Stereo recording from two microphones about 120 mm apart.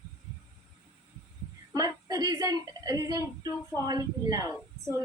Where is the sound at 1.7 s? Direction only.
35° right (ahead or behind).